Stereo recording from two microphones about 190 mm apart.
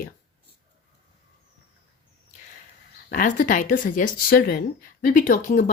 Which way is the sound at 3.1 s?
45° left (ahead or behind).